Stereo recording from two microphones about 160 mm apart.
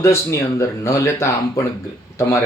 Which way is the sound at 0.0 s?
15° left (ahead or behind).